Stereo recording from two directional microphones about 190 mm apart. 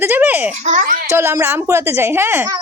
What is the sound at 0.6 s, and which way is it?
Speech, 40° right (ahead or behind).